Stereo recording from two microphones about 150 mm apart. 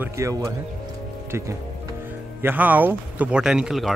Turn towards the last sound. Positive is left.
turn(degrees=-5)  # may be behind; listen again after turning